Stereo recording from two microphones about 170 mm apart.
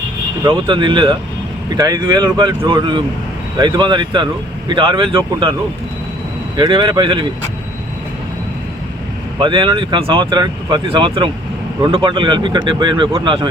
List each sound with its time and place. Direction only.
0.4 s speech: 25° right (ahead or behind)
6.6 s speech: 25° right (ahead or behind)
9.4 s speech: 30° right (ahead or behind)